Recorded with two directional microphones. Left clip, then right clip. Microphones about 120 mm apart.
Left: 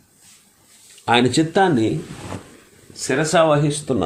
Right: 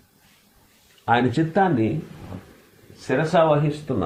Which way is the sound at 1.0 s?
70° left (ahead or behind).